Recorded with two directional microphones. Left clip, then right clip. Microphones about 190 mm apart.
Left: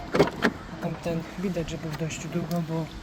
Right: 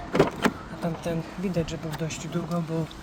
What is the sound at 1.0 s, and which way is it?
Speech, 15° right (ahead or behind).